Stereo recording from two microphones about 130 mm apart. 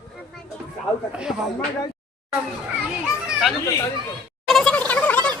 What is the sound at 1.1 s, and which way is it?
Speech, 5° right (ahead or behind).